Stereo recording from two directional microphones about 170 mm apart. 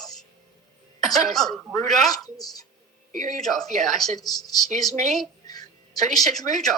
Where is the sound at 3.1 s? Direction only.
50° right (ahead or behind).